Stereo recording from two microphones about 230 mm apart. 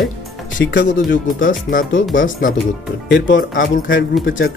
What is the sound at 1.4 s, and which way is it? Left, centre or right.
Speech, left.